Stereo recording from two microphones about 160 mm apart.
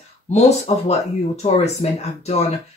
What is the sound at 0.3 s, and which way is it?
Speech, 45° left (ahead or behind).